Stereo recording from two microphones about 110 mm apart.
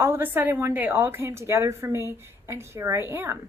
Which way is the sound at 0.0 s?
20° right (ahead or behind).